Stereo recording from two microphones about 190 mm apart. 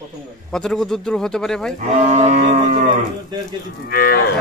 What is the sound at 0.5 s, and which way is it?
Speech, 5° left (ahead or behind).